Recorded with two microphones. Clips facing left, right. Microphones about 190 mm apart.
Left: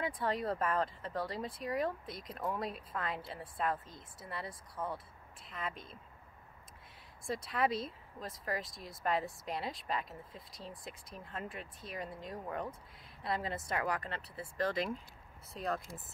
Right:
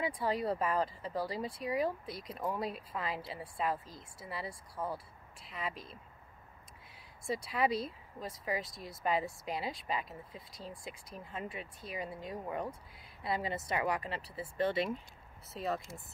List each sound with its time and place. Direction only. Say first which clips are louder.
0.0 s speech: right 2 dB; centre (ahead or behind)
4.8 s speech: right 1 dB; 15° right (ahead or behind)
5.4 s speech: right 1 dB; centre (ahead or behind)
7.5 s speech: right 1 dB; centre (ahead or behind)